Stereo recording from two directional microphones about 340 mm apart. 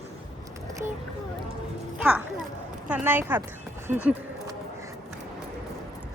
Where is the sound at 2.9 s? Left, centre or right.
Centre.